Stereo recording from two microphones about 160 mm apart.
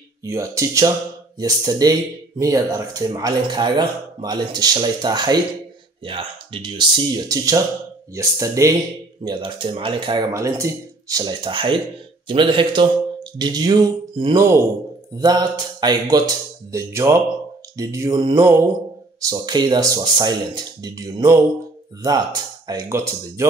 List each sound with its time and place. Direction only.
0.2 s speech: 20° right (ahead or behind)
9.2 s speech: 30° right (ahead or behind)
10.3 s speech: 20° right (ahead or behind)
14.3 s speech: 20° right (ahead or behind)
22.7 s speech: 20° right (ahead or behind)